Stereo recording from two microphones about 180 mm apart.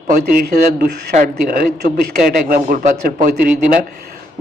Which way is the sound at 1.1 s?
50° right (ahead or behind).